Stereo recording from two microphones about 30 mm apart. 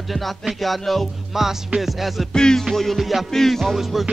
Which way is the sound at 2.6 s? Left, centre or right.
Centre.